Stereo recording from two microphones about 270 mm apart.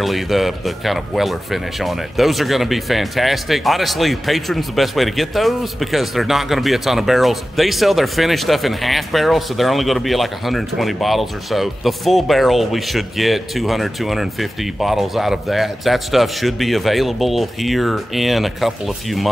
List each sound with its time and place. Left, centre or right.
0.0 s speech: centre